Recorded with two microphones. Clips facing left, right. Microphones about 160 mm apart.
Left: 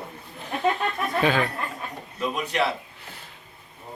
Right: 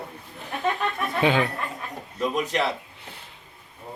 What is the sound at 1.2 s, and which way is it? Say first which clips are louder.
Speech: right 1 dB; 20° right (ahead or behind).